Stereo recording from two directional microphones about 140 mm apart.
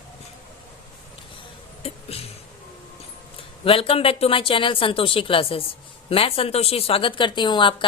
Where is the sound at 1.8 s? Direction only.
45° left (ahead or behind).